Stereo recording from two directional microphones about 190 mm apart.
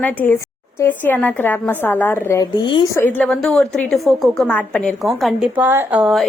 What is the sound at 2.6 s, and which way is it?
Speech, 25° left (ahead or behind).